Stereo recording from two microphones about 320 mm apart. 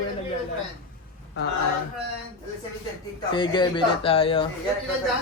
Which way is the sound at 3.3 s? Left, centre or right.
Centre.